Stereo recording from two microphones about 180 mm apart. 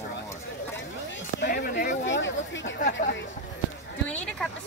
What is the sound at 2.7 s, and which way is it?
Speech, 50° left (ahead or behind).